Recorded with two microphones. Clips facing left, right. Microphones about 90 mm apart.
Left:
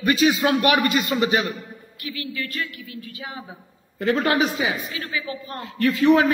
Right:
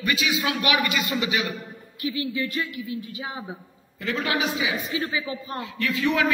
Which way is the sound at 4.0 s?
45° left (ahead or behind).